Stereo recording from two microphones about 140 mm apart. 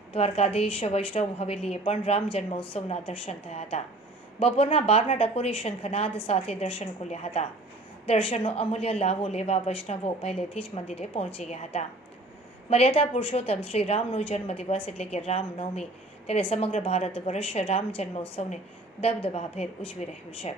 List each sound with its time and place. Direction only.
0.1 s a woman's voice: 45° left (ahead or behind)